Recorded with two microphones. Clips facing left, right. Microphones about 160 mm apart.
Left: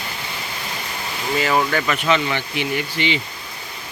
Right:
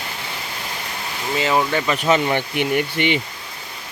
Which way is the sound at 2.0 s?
45° right (ahead or behind).